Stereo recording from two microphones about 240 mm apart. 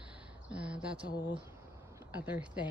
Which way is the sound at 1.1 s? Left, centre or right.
Centre.